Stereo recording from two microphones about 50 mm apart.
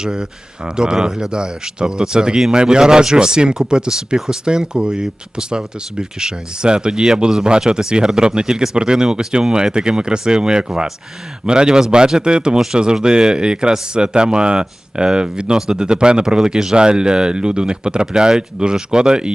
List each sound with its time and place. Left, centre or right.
0.0 s speech: centre